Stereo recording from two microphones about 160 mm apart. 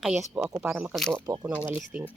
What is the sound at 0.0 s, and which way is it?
Speech, 5° right (ahead or behind).